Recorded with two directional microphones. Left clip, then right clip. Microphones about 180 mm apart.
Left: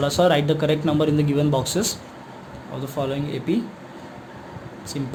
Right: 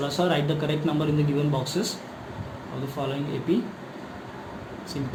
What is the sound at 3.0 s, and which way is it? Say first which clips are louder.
Speech: left 5 dB; 55° left (ahead or behind).